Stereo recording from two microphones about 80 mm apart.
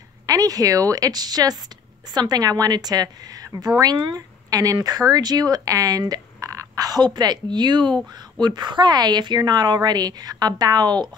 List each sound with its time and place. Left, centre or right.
0.3 s a woman's voice: right
7.2 s a woman's voice: right